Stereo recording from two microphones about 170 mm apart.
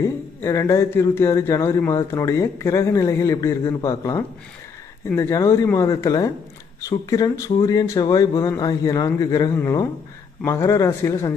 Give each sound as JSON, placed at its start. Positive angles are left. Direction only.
{"t": 0.4, "sound": "a man's voice", "side_deg": 20}